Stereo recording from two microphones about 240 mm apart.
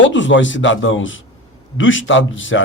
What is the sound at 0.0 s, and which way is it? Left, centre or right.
Speech, left.